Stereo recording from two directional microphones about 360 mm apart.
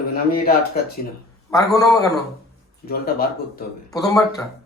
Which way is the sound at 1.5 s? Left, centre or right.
Centre.